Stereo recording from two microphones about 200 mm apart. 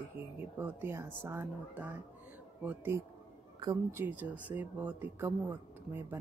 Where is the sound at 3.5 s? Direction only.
20° right (ahead or behind).